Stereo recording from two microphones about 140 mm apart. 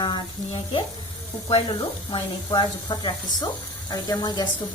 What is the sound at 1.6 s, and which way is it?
Speech, 30° left (ahead or behind).